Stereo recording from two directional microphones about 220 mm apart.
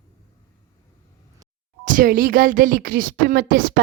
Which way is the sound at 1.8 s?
40° right (ahead or behind).